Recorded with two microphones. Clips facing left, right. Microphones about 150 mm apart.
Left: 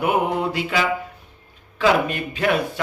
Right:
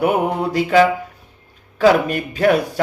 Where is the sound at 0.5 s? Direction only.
45° right (ahead or behind).